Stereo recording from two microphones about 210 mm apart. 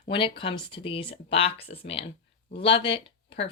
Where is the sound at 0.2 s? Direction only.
25° left (ahead or behind).